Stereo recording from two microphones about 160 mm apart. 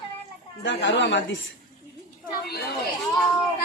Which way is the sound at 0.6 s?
90° left.